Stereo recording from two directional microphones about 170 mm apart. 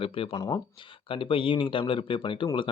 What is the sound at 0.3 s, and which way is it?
Speech, 20° left (ahead or behind).